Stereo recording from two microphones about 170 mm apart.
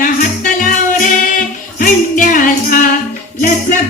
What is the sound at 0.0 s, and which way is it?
Music, 50° left (ahead or behind).